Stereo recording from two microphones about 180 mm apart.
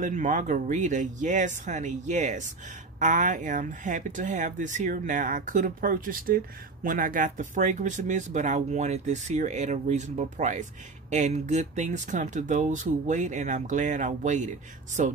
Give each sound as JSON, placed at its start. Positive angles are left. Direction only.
{"t": 0.0, "sound": "speech", "side_deg": -45}